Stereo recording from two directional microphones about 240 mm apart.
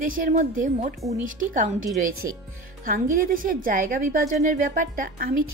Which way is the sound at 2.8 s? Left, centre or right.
Right.